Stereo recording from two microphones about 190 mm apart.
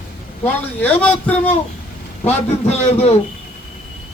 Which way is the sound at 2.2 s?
35° left (ahead or behind).